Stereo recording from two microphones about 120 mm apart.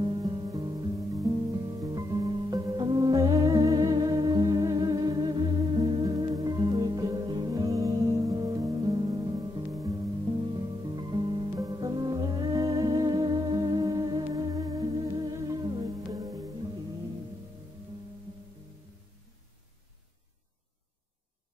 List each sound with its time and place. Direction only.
0.2 s music: 40° right (ahead or behind)
10.3 s music: 45° right (ahead or behind)